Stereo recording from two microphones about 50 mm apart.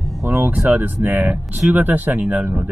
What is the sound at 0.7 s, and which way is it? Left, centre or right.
Speech, right.